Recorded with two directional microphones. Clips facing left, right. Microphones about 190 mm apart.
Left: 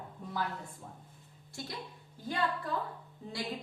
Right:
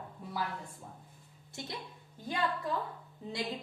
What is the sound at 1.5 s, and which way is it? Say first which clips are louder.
Speech: even; 20° right (ahead or behind).